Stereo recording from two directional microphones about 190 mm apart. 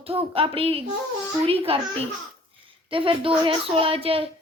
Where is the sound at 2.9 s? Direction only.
30° right (ahead or behind).